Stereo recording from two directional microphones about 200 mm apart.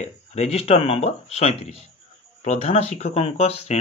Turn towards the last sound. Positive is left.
turn(degrees=30)  # may be behind; listen again after turning